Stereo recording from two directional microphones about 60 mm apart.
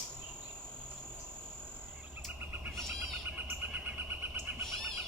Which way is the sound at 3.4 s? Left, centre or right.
Right.